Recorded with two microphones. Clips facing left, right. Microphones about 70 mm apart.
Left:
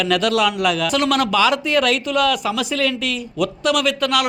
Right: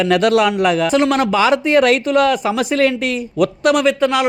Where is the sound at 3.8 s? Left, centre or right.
Right.